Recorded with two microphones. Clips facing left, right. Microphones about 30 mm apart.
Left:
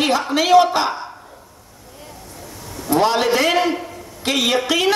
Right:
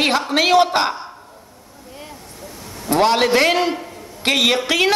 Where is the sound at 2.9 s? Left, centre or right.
Right.